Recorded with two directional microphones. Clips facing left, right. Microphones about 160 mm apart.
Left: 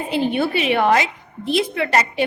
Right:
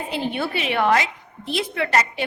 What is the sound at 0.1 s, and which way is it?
A woman's voice, 15° left (ahead or behind).